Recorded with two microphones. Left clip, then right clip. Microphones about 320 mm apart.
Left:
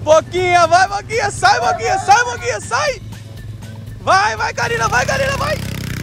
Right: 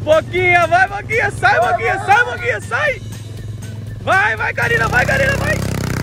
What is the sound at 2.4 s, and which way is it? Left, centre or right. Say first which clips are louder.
Speech: right 1 dB; centre.